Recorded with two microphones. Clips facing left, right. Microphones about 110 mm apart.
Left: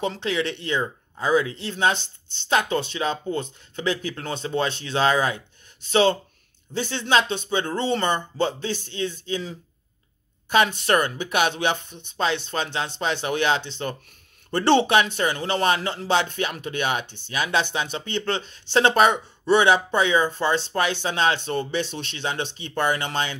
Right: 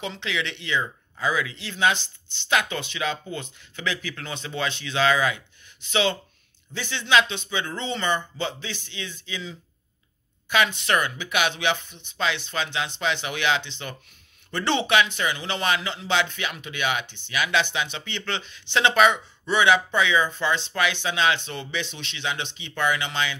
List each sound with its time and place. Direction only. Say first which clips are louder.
0.0 s a man's voice: left 5 dB; 45° left (ahead or behind)
1.1 s a man's voice: left 5 dB; 30° left (ahead or behind)